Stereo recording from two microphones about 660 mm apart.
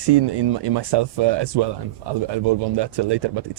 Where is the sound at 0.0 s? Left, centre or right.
Right.